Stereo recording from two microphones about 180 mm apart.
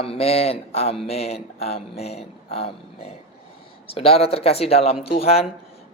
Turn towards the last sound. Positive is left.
turn(degrees=35)  # may be behind; listen again after turning